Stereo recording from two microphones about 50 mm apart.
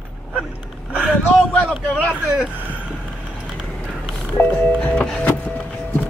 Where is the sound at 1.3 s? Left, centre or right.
Left.